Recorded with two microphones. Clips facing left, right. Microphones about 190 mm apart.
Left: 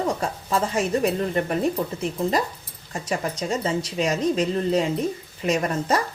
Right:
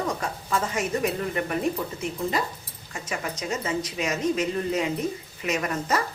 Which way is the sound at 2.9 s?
35° left (ahead or behind).